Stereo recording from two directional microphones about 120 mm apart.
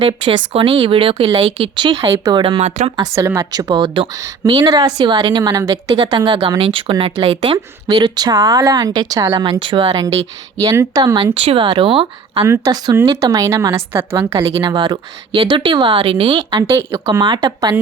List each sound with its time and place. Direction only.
0.0 s speech: 45° right (ahead or behind)
2.6 s speech: 70° right (ahead or behind)
2.9 s speech: 30° right (ahead or behind)
6.0 s speech: 45° right (ahead or behind)
9.3 s speech: 45° right (ahead or behind)
10.6 s speech: 30° right (ahead or behind)
11.3 s speech: 50° right (ahead or behind)
12.5 s a woman's voice: 35° right (ahead or behind)
14.3 s speech: 50° right (ahead or behind)